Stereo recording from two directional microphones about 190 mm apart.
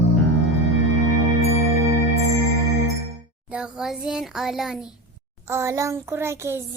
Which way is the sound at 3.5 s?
5° right (ahead or behind).